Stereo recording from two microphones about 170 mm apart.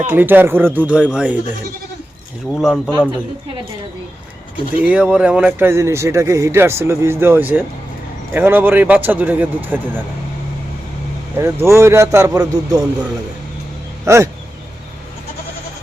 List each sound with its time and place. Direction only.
0.1 s speech: 10° right (ahead or behind)
2.5 s speech: centre (ahead or behind)
4.8 s speech: 10° right (ahead or behind)
11.3 s speech: 15° right (ahead or behind)
14.0 s speech: 15° right (ahead or behind)